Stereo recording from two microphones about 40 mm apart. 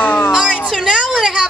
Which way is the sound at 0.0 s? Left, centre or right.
Left.